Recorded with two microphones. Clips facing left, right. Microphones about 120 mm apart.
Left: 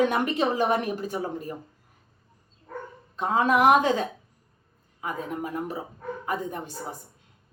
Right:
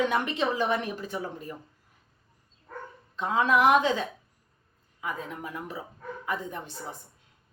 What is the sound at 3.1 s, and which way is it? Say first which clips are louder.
A woman's voice: left 2 dB; 45° left (ahead or behind).